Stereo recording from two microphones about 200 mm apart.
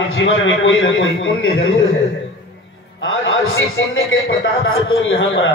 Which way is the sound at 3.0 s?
80° left.